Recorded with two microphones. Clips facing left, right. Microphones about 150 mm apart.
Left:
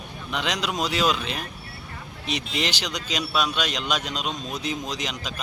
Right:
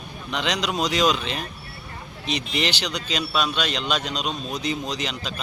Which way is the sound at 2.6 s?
10° left (ahead or behind).